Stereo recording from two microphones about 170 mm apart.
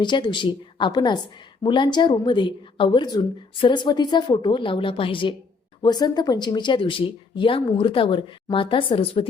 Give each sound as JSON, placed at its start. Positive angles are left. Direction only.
{"t": 0.0, "sound": "speech", "side_deg": 25}